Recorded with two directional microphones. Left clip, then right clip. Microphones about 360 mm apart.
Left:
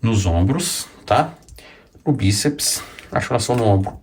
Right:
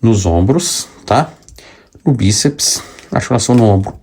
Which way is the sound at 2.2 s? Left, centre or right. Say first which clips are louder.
Right 8 dB; centre.